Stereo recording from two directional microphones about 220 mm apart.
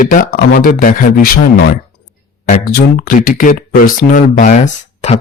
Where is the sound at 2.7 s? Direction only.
40° left (ahead or behind).